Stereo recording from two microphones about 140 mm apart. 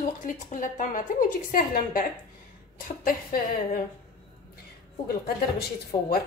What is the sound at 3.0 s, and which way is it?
Speech, 90° left.